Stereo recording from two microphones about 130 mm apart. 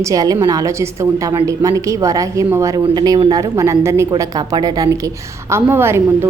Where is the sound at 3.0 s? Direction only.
35° right (ahead or behind).